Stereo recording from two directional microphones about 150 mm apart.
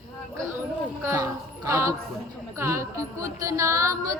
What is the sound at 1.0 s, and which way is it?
Music, 20° right (ahead or behind).